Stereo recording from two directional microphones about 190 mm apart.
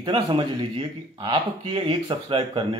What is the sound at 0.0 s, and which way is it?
Speech, 25° right (ahead or behind).